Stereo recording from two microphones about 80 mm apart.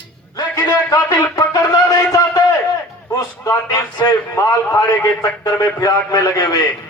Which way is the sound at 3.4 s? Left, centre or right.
Left.